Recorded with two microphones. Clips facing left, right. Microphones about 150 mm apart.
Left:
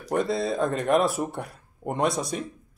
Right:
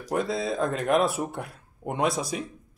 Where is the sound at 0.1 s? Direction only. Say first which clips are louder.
Left 2 dB; centre (ahead or behind).